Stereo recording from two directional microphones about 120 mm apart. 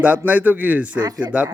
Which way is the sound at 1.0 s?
35° right (ahead or behind).